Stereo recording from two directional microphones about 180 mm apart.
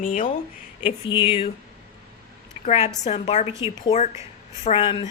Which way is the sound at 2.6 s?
35° left (ahead or behind).